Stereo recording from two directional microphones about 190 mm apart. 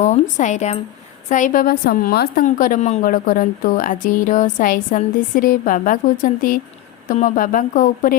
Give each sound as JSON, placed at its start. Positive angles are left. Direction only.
{"t": 0.0, "sound": "a woman's voice", "side_deg": 40}